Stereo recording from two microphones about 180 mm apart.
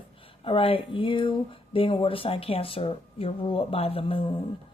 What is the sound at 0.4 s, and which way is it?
Speech, 30° left (ahead or behind).